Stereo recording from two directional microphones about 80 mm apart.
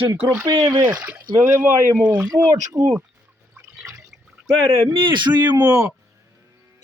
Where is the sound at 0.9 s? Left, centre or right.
Right.